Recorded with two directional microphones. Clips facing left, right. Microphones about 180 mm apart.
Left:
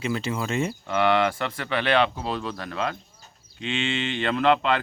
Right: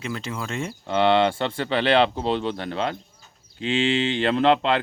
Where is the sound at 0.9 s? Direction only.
30° right (ahead or behind).